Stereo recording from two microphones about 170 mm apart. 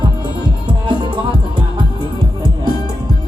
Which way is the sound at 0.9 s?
30° right (ahead or behind).